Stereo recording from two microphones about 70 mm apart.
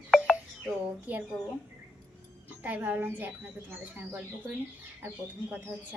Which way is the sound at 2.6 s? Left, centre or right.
Right.